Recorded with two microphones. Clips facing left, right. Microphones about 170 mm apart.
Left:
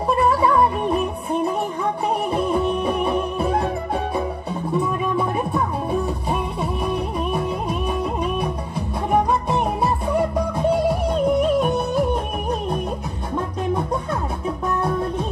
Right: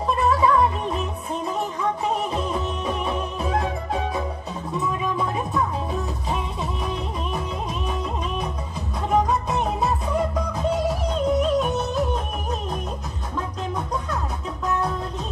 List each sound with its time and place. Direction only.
0.2 s music: 55° left (ahead or behind)
9.8 s music: centre (ahead or behind)
11.6 s music: 55° left (ahead or behind)